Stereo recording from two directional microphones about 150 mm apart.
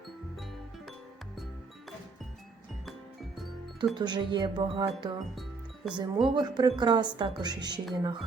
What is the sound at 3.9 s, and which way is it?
Speech, 30° right (ahead or behind).